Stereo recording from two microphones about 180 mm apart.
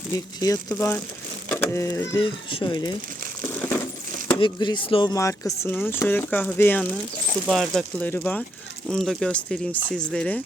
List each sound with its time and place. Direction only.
0.3 s speech: 20° left (ahead or behind)
2.2 s speech: 30° left (ahead or behind)
4.4 s speech: 25° left (ahead or behind)
5.1 s speech: 15° left (ahead or behind)
7.4 s speech: centre (ahead or behind)